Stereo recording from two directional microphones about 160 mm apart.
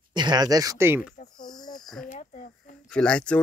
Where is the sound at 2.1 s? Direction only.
55° left (ahead or behind).